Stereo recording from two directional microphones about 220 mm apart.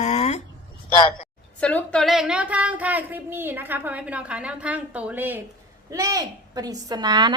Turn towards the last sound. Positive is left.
turn(degrees=-20)  # may be behind; listen again after turning